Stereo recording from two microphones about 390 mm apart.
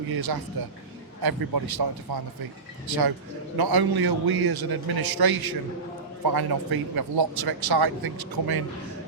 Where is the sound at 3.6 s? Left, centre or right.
Right.